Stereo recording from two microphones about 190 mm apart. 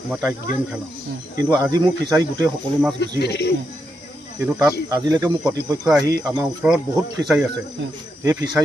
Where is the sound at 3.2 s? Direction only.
60° left (ahead or behind).